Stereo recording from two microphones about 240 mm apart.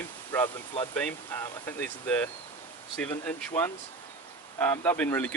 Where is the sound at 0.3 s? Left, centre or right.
Centre.